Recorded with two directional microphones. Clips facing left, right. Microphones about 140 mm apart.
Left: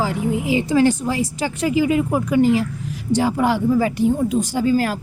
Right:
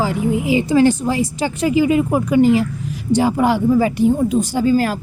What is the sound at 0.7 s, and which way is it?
Speech, 25° right (ahead or behind).